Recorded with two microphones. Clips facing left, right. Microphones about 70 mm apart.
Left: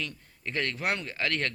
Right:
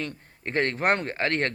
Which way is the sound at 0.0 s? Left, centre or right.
Right.